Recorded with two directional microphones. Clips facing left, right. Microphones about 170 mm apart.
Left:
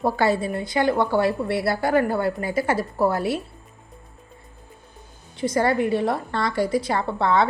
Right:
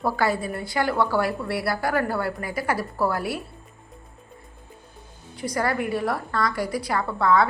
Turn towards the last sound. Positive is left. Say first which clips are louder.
# even
turn(degrees=25)  # may be behind; listen again after turning